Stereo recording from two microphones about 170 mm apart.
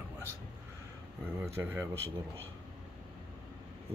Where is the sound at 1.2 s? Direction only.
15° right (ahead or behind).